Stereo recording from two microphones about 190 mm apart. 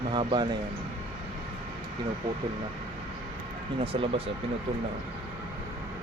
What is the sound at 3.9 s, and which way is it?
Speech, 30° right (ahead or behind).